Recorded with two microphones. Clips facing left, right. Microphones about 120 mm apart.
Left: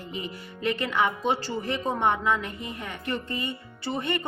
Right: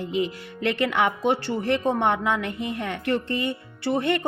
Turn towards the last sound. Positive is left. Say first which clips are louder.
# right 6 dB
turn(degrees=-70)  # may be behind; listen again after turning